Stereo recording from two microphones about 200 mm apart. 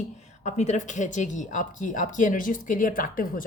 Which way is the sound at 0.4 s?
35° left (ahead or behind).